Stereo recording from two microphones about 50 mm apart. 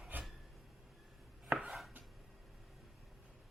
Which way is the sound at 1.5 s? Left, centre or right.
Right.